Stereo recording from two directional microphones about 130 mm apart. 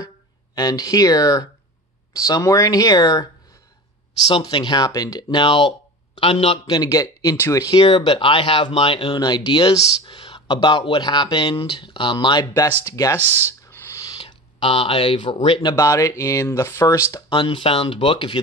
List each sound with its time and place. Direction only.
0.6 s speech: 30° left (ahead or behind)
4.3 s speech: 35° left (ahead or behind)
5.4 s speech: 40° left (ahead or behind)
6.7 s speech: 25° left (ahead or behind)
7.8 s speech: 50° left (ahead or behind); by 13.2 s 25° left (ahead or behind)
13.2 s speech: 15° right (ahead or behind)
13.5 s a sound: 20° left (ahead or behind)
14.2 s speech: 40° left (ahead or behind)
15.7 s speech: 25° left (ahead or behind)
17.3 s speech: 40° left (ahead or behind)